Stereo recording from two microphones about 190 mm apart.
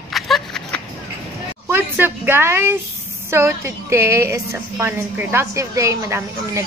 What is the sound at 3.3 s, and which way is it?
A woman's voice, 15° right (ahead or behind).